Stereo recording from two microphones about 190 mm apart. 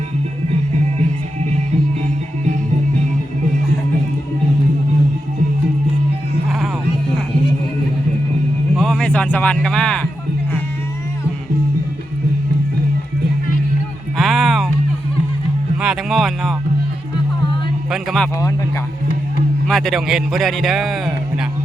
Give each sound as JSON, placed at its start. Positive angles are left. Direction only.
{"t": 0.9, "sound": "music", "side_deg": -35}
{"t": 8.8, "sound": "speech", "side_deg": 5}
{"t": 14.2, "sound": "music", "side_deg": 0}
{"t": 15.8, "sound": "music", "side_deg": 0}
{"t": 17.9, "sound": "a sound", "side_deg": 0}
{"t": 19.6, "sound": "speech", "side_deg": 0}